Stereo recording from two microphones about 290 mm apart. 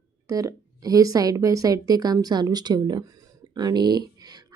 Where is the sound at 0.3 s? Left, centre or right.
Centre.